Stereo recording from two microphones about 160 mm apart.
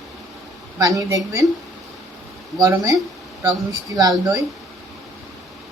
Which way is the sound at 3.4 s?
25° right (ahead or behind).